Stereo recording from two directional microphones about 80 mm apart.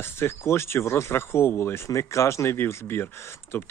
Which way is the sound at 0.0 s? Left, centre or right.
Left.